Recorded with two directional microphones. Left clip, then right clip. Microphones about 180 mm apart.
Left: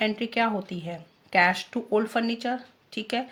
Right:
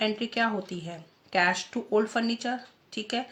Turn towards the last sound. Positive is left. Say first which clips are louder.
# left 2 dB
turn(degrees=35)  # may be behind; listen again after turning